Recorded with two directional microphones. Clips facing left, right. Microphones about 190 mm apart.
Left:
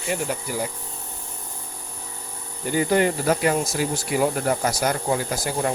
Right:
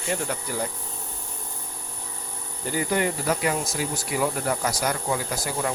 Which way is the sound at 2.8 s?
30° left (ahead or behind).